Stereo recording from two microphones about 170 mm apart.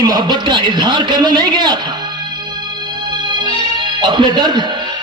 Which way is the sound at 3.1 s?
25° right (ahead or behind).